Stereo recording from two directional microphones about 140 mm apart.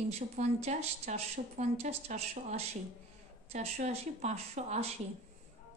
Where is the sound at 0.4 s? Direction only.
50° right (ahead or behind).